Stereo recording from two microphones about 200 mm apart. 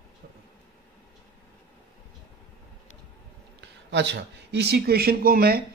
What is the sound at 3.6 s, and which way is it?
A man's voice, 60° right (ahead or behind).